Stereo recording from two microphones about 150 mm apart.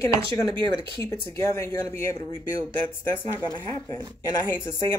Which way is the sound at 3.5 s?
30° left (ahead or behind).